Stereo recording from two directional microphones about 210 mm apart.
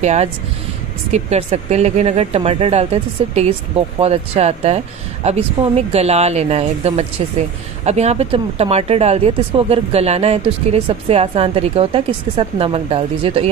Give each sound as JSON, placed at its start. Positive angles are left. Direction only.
{"t": 0.0, "sound": "speech", "side_deg": -30}